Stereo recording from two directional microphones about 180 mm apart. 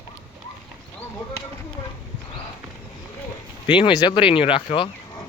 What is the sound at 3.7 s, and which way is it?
Speech, 25° left (ahead or behind).